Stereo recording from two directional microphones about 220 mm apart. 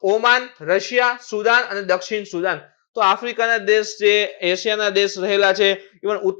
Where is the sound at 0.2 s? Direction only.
15° left (ahead or behind).